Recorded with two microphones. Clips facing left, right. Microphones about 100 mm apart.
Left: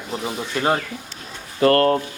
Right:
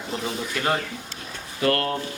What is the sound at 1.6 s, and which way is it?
Speech, 40° left (ahead or behind).